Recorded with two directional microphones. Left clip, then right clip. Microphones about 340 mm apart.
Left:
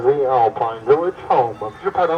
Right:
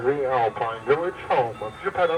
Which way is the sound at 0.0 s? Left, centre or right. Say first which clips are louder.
Left 7 dB; centre.